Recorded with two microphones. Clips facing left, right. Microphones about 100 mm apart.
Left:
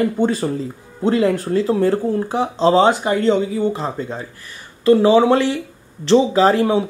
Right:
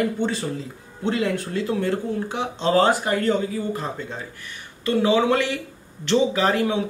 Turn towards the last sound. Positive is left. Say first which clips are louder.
# left 7 dB
turn(degrees=30)  # may be behind; listen again after turning